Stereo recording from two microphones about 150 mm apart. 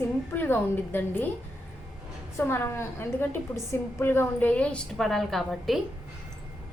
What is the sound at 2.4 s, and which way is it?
A woman's voice, 15° left (ahead or behind).